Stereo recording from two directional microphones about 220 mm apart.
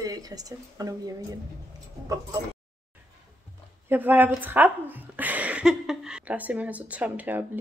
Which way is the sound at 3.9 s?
10° right (ahead or behind).